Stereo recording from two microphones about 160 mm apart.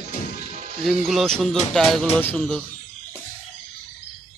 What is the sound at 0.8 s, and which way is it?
Speech, centre (ahead or behind).